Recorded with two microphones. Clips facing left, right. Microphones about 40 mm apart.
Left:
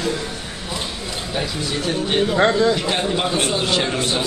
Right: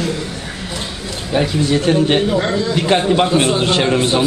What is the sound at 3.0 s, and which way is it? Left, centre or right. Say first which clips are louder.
A man's voice: right 6 dB; centre.